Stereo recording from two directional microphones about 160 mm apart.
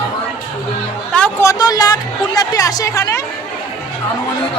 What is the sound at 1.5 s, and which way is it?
Speech, 25° left (ahead or behind).